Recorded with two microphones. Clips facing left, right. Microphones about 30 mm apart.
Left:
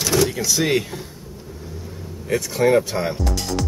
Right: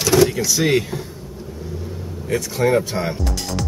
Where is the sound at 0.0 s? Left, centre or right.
Centre.